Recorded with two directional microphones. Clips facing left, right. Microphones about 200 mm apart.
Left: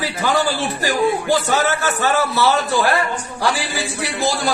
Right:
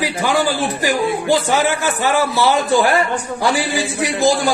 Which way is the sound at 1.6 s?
15° right (ahead or behind).